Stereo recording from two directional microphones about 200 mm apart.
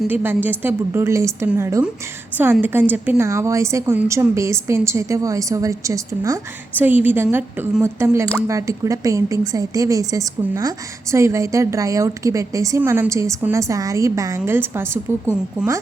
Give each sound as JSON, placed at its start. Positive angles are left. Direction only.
{"t": 0.1, "sound": "a woman's voice", "side_deg": -10}